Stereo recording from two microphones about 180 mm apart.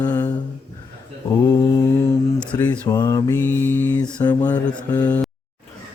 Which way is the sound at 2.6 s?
10° left (ahead or behind).